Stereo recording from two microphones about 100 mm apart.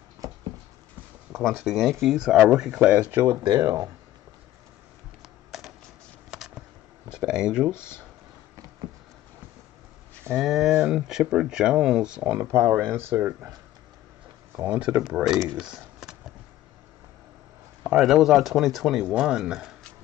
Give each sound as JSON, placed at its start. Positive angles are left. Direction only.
{"t": 1.3, "sound": "speech", "side_deg": 0}
{"t": 3.2, "sound": "speech", "side_deg": -35}
{"t": 5.2, "sound": "typing", "side_deg": 0}
{"t": 6.3, "sound": "a sound", "side_deg": 0}
{"t": 7.2, "sound": "speech", "side_deg": -10}
{"t": 7.7, "sound": "speech", "side_deg": 25}
{"t": 10.3, "sound": "speech", "side_deg": -5}
{"t": 12.4, "sound": "speech", "side_deg": -35}
{"t": 12.9, "sound": "speech", "side_deg": -20}
{"t": 14.6, "sound": "speech", "side_deg": -15}
{"t": 17.8, "sound": "speech", "side_deg": -5}